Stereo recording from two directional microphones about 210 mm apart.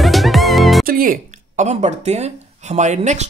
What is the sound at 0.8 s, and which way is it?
Speech, 40° right (ahead or behind).